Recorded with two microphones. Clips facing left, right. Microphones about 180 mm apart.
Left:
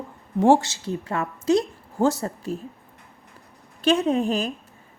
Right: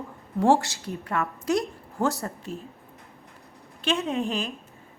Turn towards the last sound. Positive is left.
turn(degrees=40)  # may be behind; listen again after turning